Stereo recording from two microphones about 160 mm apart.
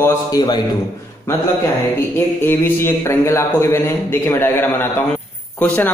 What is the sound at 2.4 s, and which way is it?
Speech, 15° left (ahead or behind).